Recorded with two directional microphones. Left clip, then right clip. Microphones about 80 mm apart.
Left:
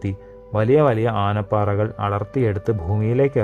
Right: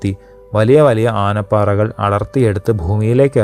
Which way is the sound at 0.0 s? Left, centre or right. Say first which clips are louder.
Right 7 dB; right.